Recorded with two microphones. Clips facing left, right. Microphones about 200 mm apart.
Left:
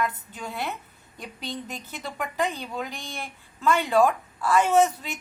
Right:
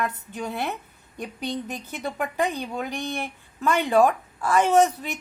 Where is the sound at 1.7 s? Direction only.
15° right (ahead or behind).